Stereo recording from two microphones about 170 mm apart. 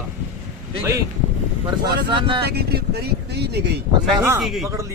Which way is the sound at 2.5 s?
70° right (ahead or behind).